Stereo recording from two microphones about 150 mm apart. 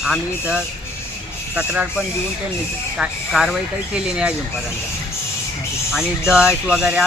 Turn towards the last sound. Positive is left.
turn(degrees=-5)  # may be behind; listen again after turning